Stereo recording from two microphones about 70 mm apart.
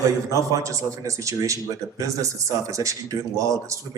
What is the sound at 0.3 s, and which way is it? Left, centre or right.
A man's voice, right.